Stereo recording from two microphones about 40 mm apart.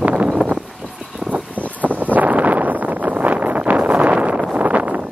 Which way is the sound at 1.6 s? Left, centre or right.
Right.